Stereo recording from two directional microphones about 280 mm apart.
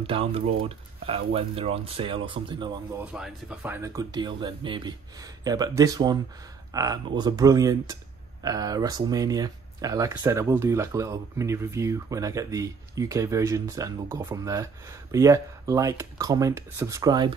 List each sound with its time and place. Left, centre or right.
0.0 s speech: right
3.1 s speech: centre